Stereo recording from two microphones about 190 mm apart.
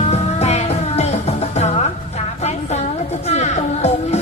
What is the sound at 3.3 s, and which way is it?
Music, 35° left (ahead or behind).